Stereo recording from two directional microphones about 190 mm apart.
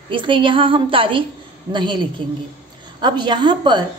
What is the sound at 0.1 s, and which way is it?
A woman's voice, 25° right (ahead or behind).